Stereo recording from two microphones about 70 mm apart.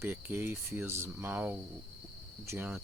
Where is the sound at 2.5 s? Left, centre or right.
Right.